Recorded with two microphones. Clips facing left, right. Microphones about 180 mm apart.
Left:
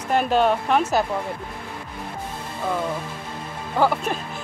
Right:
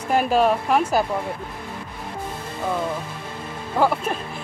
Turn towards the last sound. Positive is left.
turn(degrees=0)  # may be behind; listen again after turning